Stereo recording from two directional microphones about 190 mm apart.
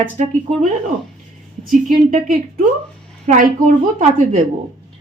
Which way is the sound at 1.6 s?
45° right (ahead or behind).